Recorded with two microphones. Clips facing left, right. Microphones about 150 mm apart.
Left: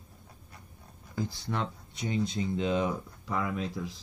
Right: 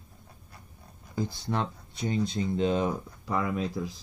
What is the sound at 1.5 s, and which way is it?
Speech, 35° right (ahead or behind).